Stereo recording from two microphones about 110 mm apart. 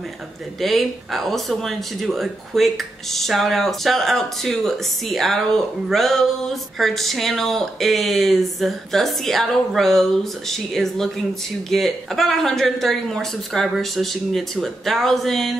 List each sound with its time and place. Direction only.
0.6 s speech: centre (ahead or behind)